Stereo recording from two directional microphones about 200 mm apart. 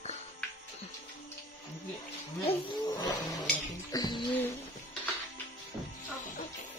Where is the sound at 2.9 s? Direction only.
20° left (ahead or behind).